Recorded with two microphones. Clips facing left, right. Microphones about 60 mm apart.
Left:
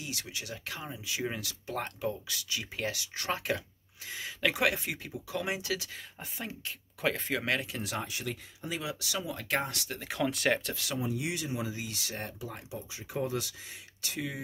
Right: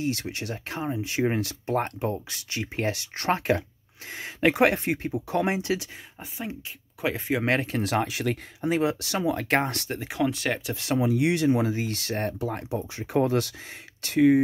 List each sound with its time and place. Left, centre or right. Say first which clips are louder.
0.0 s speech: right 11 dB; right
7.0 s speech: right 5 dB; centre
7.4 s speech: right 8 dB; right
8.6 s speech: right 12 dB; right
9.9 s speech: right 5 dB; centre
10.3 s speech: even; centre
10.7 s speech: right 8 dB; right
11.0 s speech: right 12 dB; right